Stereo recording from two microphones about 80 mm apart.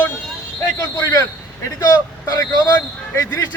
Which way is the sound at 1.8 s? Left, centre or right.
Left.